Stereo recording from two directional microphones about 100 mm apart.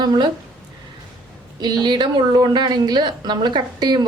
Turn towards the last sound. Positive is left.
turn(degrees=-45)  # may be behind; listen again after turning